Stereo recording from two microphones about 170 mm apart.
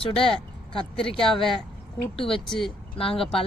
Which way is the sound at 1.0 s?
30° left (ahead or behind).